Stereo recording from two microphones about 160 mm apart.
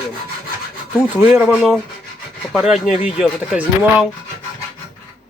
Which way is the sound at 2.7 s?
45° left (ahead or behind).